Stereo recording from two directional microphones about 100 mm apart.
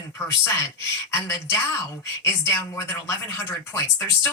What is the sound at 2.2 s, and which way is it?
Speech, 30° left (ahead or behind).